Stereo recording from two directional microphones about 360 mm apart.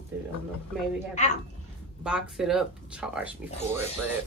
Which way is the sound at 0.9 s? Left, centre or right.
Centre.